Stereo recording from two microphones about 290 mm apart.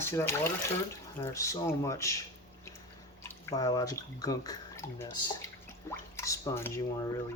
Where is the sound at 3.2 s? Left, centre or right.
Centre.